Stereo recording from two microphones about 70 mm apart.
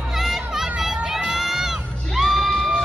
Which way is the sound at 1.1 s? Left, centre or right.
Centre.